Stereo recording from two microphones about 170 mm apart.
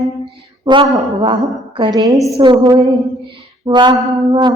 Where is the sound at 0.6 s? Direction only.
30° right (ahead or behind).